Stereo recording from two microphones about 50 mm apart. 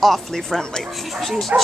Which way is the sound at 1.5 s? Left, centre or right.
Right.